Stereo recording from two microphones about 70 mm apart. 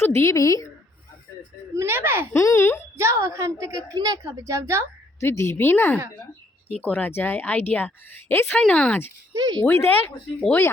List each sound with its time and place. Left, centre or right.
0.0 s a woman's voice: left
1.7 s speech: right
2.3 s speech: left
3.0 s a woman's voice: right
4.2 s a woman's voice: right
5.2 s a woman's voice: left
8.5 s a woman's voice: centre
9.3 s speech: right
9.6 s speech: left